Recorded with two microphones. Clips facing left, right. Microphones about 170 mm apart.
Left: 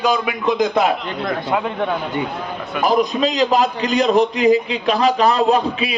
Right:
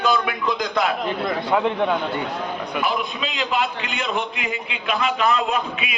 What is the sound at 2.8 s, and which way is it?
A man's voice, 40° left (ahead or behind).